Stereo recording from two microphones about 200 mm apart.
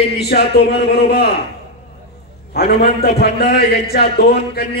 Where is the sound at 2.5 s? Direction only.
55° left (ahead or behind).